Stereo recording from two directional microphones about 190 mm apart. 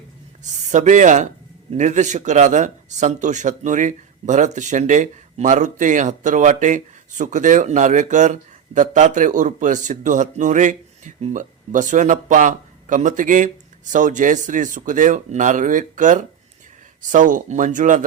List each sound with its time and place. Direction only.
0.7 s speech: 40° right (ahead or behind)